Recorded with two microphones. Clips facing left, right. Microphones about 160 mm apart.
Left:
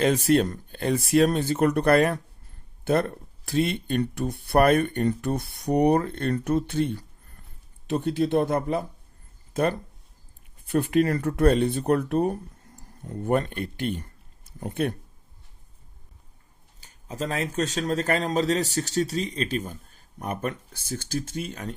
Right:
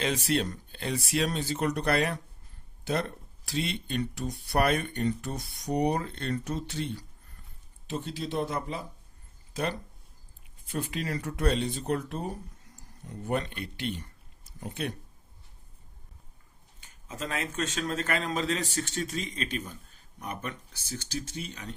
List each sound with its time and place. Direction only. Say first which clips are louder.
0.0 s speech: left 8 dB; 50° left (ahead or behind)
16.8 s speech: left 6 dB; 35° left (ahead or behind)